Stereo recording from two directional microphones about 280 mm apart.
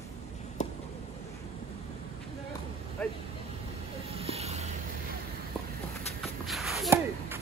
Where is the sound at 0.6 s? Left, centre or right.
Left.